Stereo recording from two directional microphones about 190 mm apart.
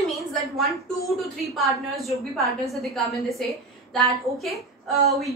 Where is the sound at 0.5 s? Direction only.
Centre (ahead or behind).